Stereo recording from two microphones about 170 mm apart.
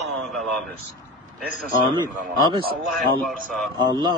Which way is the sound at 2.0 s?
25° right (ahead or behind).